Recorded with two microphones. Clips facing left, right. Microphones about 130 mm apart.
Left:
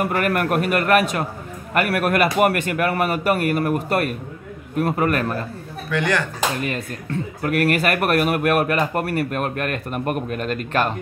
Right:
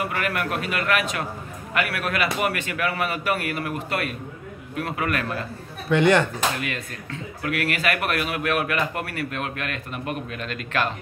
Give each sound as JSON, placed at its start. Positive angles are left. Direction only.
{"t": 0.0, "sound": "a man's voice", "side_deg": 50}
{"t": 5.9, "sound": "speech", "side_deg": -25}
{"t": 6.6, "sound": "a man's voice", "side_deg": 40}